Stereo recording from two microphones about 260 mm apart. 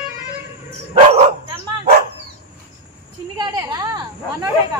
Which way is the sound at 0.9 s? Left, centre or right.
Right.